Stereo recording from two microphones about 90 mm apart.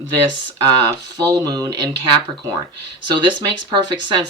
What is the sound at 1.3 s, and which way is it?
Speech, 45° right (ahead or behind).